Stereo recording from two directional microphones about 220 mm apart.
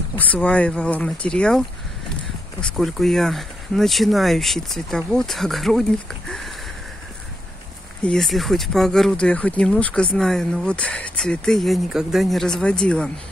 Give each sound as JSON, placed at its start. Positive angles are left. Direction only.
{"t": 0.2, "sound": "speech", "side_deg": 5}
{"t": 2.6, "sound": "speech", "side_deg": 0}
{"t": 8.0, "sound": "speech", "side_deg": 0}